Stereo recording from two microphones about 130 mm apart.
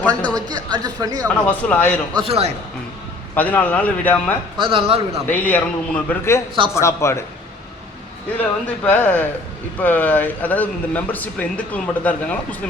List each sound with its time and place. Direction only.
0.3 s speech: 30° right (ahead or behind)
1.5 s speech: 10° left (ahead or behind)
2.1 s speech: 50° right (ahead or behind)
3.3 s speech: 10° left (ahead or behind)
4.5 s speech: 45° right (ahead or behind)
5.3 s speech: 15° left (ahead or behind)
8.4 s speech: 10° left (ahead or behind)